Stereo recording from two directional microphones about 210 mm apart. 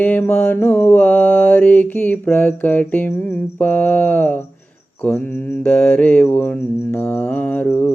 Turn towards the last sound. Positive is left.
turn(degrees=10)  # may be behind; listen again after turning